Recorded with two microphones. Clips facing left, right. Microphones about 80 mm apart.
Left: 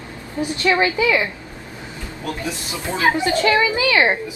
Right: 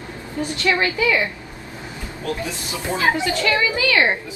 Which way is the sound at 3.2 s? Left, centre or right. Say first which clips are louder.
Left 3 dB; left.